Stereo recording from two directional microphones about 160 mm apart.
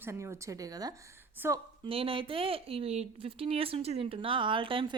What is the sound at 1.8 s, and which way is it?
Speech, 35° right (ahead or behind).